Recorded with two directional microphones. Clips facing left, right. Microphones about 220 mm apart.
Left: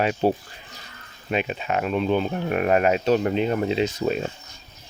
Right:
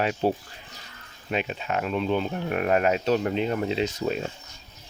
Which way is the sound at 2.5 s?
10° left (ahead or behind).